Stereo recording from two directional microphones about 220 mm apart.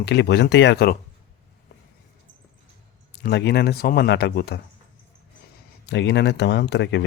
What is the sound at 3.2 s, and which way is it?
A man's voice, 50° left (ahead or behind).